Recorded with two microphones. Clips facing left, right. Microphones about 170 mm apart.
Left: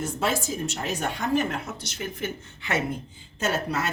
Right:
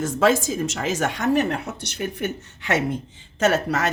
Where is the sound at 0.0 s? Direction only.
90° right; by 2.8 s 75° right (ahead or behind).